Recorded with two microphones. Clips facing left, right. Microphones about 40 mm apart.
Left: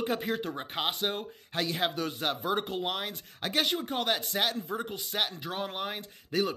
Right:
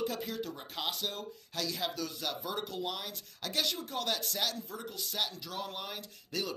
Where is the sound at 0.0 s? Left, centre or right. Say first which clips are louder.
Left 5 dB; left.